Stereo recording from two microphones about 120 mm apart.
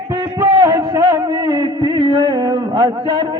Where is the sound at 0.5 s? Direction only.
30° right (ahead or behind).